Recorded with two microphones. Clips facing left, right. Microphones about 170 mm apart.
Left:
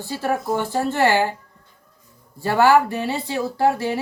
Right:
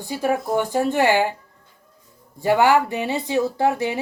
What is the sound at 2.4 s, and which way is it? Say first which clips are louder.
A woman's voice: left 1 dB; 15° right (ahead or behind).